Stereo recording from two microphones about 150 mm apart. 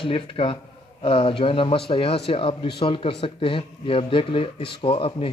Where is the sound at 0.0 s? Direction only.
35° left (ahead or behind).